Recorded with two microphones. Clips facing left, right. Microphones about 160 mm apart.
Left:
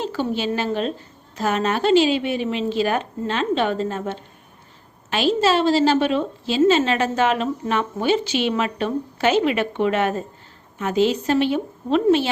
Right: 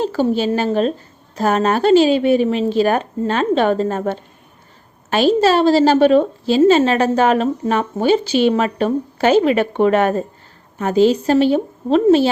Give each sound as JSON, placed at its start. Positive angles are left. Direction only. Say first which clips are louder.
{"t": 0.0, "sound": "a woman's voice", "louder": "right 6 dB", "side_deg": -40}